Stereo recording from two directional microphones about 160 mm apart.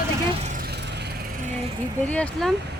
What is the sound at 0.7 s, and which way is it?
Vehicle, 90° right.